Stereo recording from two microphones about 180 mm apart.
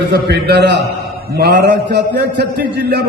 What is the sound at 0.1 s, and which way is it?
A man's voice, 65° right (ahead or behind).